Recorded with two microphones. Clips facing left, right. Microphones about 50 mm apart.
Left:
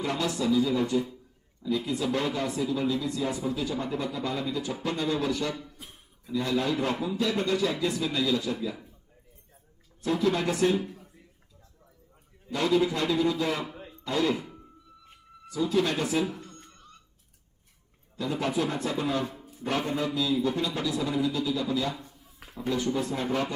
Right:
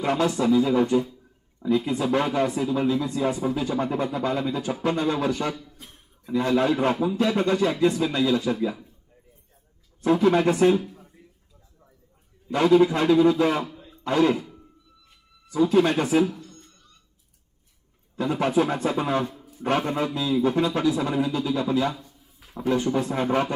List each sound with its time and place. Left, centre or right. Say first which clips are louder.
0.0 s a man's voice: right 6 dB; right
5.5 s speech: left 1 dB; centre
6.3 s a man's voice: right 6 dB; right
10.0 s a man's voice: right 7 dB; right
12.5 s a man's voice: right 7 dB; right
15.5 s a man's voice: right 6 dB; right
16.3 s a sound: right 1 dB; left
18.2 s a man's voice: right 6 dB; right
20.1 s a sound: right 1 dB; right
20.4 s a man's voice: right 7 dB; right